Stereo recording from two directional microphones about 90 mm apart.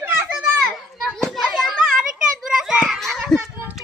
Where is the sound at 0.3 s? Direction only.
5° right (ahead or behind).